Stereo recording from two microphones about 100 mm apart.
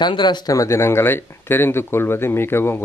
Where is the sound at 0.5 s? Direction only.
30° left (ahead or behind).